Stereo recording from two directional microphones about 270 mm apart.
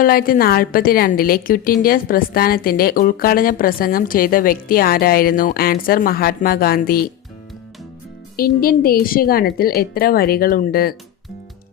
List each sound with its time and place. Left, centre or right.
0.0 s a woman's voice: left
8.4 s a woman's voice: left